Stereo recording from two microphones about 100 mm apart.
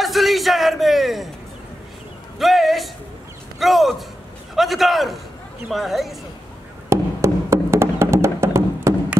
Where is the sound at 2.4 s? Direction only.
Centre (ahead or behind).